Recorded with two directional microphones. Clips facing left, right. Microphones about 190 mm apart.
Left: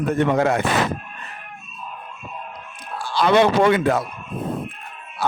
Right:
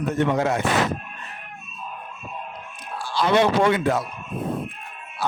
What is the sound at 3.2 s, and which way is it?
Speech, 65° left (ahead or behind).